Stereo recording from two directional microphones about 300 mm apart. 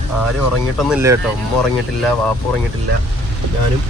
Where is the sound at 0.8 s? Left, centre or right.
Centre.